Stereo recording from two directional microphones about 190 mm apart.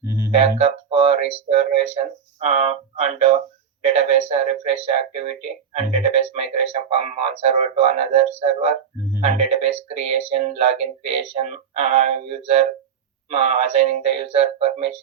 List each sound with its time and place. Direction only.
0.0 s music: 25° left (ahead or behind)
0.3 s speech: 35° right (ahead or behind)